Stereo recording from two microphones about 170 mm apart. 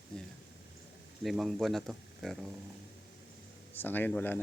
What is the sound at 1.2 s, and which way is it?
Speech, centre (ahead or behind).